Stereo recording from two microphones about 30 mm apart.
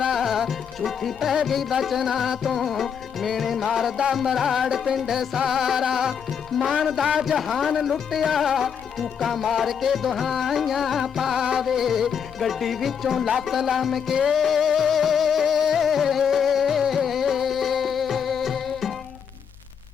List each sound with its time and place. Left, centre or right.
0.1 s music: centre